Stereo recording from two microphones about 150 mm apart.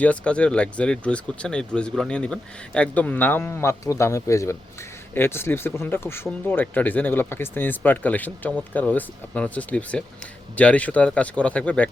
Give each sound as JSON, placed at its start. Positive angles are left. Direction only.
{"t": 0.0, "sound": "speech", "side_deg": 10}